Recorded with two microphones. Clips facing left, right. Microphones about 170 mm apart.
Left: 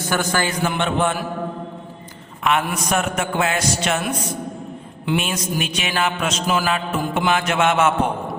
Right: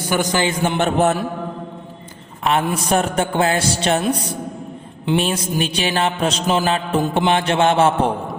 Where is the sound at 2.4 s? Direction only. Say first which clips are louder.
Right 2 dB; 30° right (ahead or behind).